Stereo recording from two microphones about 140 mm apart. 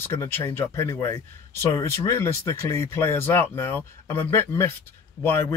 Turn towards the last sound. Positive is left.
turn(degrees=15)  # may be behind; listen again after turning